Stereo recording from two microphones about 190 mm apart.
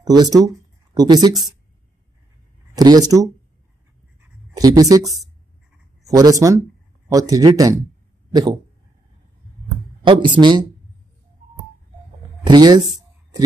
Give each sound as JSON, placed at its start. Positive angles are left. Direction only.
{"t": 0.0, "sound": "speech", "side_deg": -20}
{"t": 2.7, "sound": "speech", "side_deg": -20}
{"t": 4.6, "sound": "speech", "side_deg": -20}
{"t": 10.0, "sound": "speech", "side_deg": -25}
{"t": 12.4, "sound": "a sound", "side_deg": -20}